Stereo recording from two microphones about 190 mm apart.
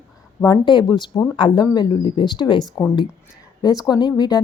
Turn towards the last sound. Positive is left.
turn(degrees=20)  # may be behind; listen again after turning